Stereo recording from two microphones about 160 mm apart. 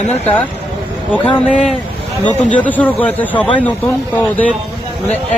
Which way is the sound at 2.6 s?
10° left (ahead or behind).